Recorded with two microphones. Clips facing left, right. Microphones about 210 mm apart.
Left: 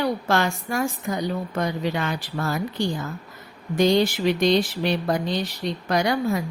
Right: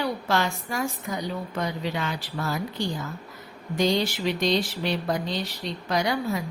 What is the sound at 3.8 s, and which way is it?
Speech, 55° left (ahead or behind).